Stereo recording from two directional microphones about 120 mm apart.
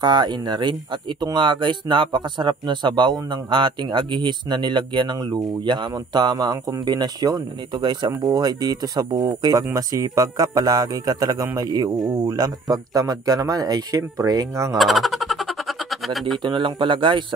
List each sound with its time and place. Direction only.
0.0 s speech: 40° right (ahead or behind)
14.8 s a sound: centre (ahead or behind)
16.4 s speech: 40° right (ahead or behind)